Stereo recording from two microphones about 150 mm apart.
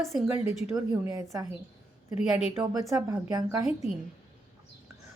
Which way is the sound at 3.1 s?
20° right (ahead or behind).